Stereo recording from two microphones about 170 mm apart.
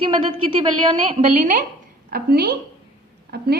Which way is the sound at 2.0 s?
65° right (ahead or behind).